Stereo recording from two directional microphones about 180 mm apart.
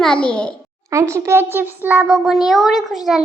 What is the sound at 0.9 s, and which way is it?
A child's voice, 15° right (ahead or behind).